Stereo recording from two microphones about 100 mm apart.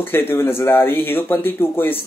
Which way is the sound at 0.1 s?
20° left (ahead or behind).